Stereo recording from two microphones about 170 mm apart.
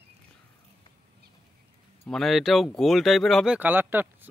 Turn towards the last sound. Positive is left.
turn(degrees=-10)  # may be behind; listen again after turning